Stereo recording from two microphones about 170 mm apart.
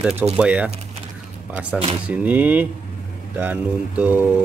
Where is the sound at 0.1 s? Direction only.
40° right (ahead or behind).